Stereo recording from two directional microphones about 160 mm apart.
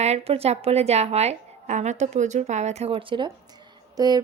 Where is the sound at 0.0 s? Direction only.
40° right (ahead or behind).